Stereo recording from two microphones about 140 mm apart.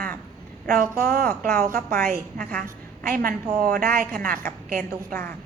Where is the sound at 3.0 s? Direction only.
90° right.